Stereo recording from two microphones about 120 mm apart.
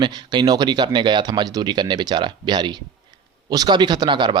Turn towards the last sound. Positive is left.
turn(degrees=-40)  # may be behind; listen again after turning